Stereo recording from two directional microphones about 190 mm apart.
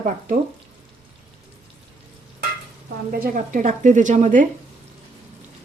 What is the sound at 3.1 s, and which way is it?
A woman's voice, 45° right (ahead or behind).